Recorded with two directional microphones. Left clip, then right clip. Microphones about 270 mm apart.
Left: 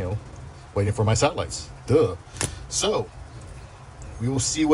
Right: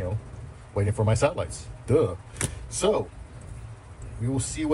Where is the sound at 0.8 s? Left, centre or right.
Centre.